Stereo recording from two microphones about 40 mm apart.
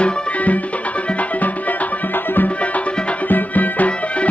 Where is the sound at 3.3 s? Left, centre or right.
Left.